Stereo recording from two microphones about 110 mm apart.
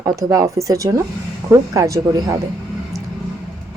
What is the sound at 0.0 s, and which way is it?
A woman's voice, 30° right (ahead or behind).